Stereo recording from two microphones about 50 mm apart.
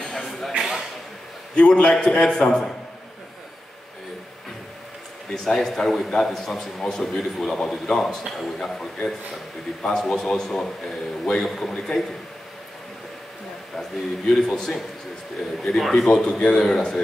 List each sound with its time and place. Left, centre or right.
0.0 s a sound: centre
0.5 s a sound: centre
1.5 s a man's voice: centre
5.3 s a man's voice: centre
13.7 s a man's voice: centre
16.1 s a man's voice: centre